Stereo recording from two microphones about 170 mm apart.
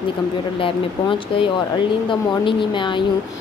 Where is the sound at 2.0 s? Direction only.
30° left (ahead or behind).